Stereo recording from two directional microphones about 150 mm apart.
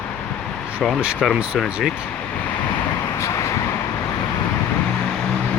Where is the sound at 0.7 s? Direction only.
5° right (ahead or behind).